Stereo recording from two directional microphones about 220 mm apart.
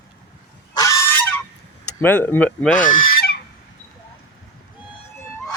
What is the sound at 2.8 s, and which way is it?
Goose, 40° left (ahead or behind).